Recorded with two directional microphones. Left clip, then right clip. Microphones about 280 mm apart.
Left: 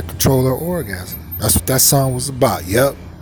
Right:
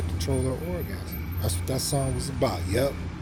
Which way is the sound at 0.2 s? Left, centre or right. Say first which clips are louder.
Left 14 dB; left.